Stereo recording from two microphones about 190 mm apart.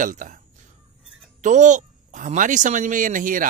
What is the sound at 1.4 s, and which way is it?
Speech, 40° right (ahead or behind).